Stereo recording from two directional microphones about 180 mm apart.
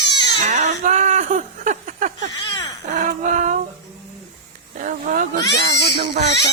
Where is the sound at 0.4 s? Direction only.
40° right (ahead or behind).